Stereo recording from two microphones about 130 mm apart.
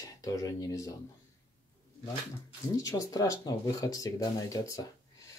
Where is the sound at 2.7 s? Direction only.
25° left (ahead or behind).